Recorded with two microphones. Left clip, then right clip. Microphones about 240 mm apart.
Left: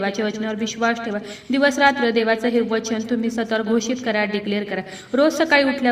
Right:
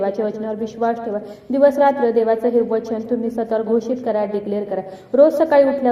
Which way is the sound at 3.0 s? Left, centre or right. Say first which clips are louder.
Right 2 dB; left.